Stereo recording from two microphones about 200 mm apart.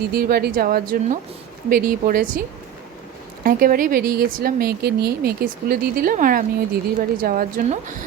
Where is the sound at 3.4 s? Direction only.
45° right (ahead or behind).